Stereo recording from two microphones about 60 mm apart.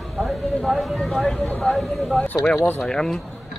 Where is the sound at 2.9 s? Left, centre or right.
Centre.